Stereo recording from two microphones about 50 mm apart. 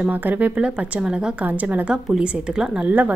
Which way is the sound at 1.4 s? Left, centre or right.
Right.